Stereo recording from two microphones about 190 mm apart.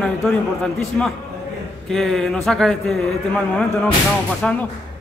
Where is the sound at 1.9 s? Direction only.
Centre (ahead or behind).